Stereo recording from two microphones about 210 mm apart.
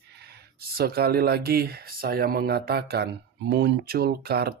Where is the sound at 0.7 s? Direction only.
50° right (ahead or behind).